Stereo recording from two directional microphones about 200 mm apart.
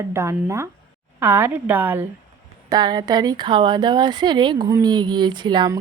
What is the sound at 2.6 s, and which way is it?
A woman's voice, 20° right (ahead or behind).